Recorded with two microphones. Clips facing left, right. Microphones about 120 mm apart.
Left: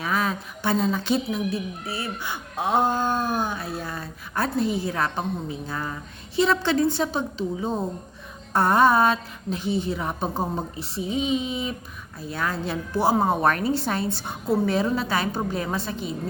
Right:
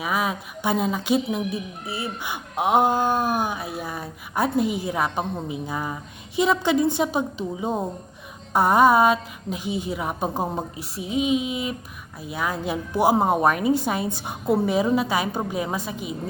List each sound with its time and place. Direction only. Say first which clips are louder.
0.0 s speech: even; 10° right (ahead or behind)